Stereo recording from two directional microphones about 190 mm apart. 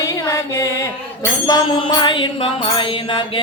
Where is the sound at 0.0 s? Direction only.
15° left (ahead or behind).